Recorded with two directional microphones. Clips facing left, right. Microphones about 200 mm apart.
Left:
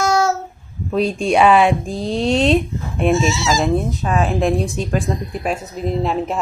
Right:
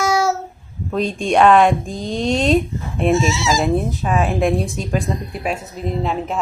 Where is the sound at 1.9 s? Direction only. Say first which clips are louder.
Left 2 dB; 35° left (ahead or behind).